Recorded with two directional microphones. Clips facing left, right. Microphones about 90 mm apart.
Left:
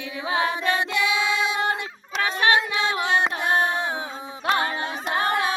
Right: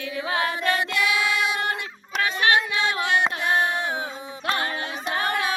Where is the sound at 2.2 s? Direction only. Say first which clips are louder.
Left 1 dB; 25° left (ahead or behind).